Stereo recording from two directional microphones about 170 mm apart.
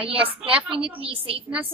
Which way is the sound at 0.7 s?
35° right (ahead or behind).